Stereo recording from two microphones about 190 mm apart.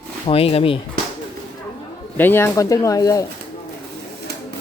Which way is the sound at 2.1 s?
10° left (ahead or behind).